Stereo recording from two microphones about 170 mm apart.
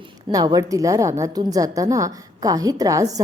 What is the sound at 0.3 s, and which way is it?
A woman's voice, 20° right (ahead or behind).